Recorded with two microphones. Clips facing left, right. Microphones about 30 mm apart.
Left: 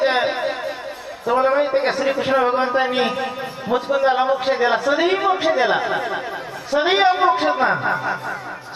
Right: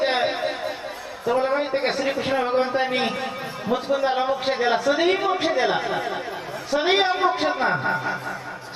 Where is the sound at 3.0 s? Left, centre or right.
Left.